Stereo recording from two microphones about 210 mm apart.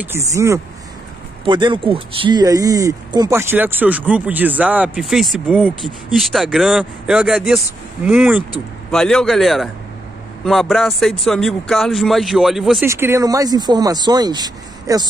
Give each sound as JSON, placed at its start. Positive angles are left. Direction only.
{"t": 0.0, "sound": "speech", "side_deg": -10}
{"t": 12.8, "sound": "speech", "side_deg": -15}